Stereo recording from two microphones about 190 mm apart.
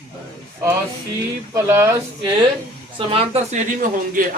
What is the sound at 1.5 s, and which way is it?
Speech, 15° right (ahead or behind).